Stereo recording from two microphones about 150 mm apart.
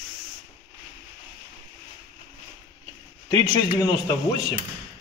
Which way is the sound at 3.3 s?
25° left (ahead or behind).